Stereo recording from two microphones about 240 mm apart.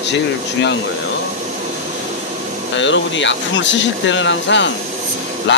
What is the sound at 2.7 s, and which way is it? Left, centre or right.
Speech, left.